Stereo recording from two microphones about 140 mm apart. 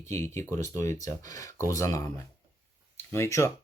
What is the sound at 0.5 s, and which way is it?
Speech, 20° left (ahead or behind).